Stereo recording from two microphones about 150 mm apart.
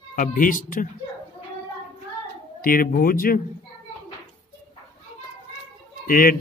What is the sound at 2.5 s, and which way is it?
Speech, 70° left (ahead or behind).